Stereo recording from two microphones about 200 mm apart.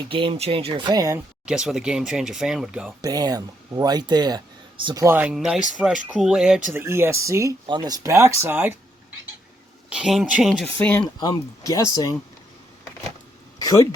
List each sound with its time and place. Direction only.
0.1 s speech: 25° right (ahead or behind)
1.5 s speech: 5° right (ahead or behind)
3.0 s speech: 20° right (ahead or behind)
5.0 s speech: 10° right (ahead or behind)
9.9 s speech: centre (ahead or behind)
10.7 s speech: 10° left (ahead or behind)
11.2 s speech: 20° left (ahead or behind)